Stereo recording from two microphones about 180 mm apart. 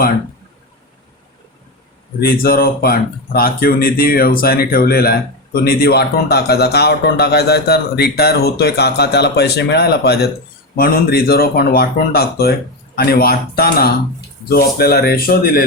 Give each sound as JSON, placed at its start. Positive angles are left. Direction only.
{"t": 2.2, "sound": "a man's voice", "side_deg": 55}